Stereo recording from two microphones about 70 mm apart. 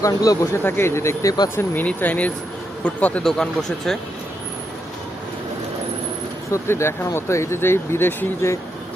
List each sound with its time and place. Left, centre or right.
0.0 s speech: left
0.5 s speech: left
1.5 s a man's voice: left
3.2 s speech: centre
6.5 s speech: left